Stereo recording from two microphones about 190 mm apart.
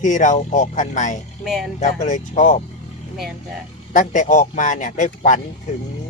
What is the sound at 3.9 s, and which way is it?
Speech, 45° left (ahead or behind).